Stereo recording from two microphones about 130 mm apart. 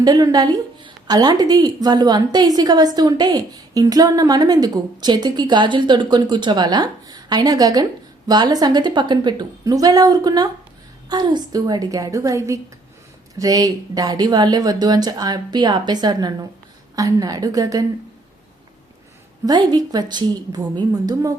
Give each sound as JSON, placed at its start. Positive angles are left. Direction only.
{"t": 0.0, "sound": "a woman's voice", "side_deg": -30}
{"t": 19.5, "sound": "a woman's voice", "side_deg": -30}